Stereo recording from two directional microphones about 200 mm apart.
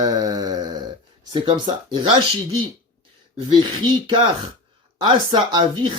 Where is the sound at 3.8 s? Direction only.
25° right (ahead or behind).